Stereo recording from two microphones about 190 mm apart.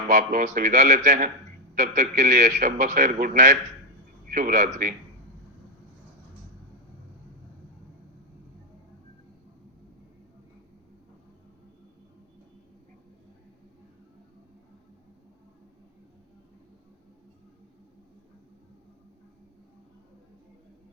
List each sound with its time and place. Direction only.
0.1 s a man's voice: 45° right (ahead or behind)